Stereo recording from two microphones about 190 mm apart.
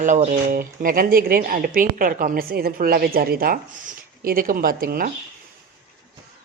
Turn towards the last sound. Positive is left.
turn(degrees=-50)  # may be behind; listen again after turning